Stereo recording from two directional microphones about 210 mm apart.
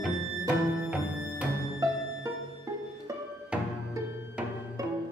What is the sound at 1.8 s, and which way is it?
Music, 15° right (ahead or behind).